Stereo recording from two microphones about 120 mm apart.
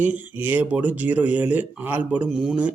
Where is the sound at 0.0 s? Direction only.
15° right (ahead or behind).